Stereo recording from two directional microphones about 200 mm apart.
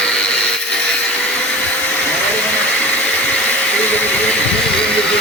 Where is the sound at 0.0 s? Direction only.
5° left (ahead or behind).